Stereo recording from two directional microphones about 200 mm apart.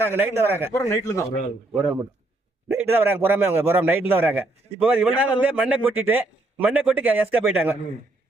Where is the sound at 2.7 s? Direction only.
10° right (ahead or behind).